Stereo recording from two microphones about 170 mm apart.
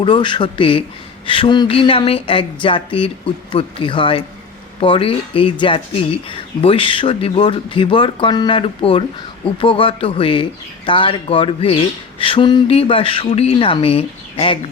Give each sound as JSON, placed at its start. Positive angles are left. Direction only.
{"t": 0.0, "sound": "a man's voice", "side_deg": 30}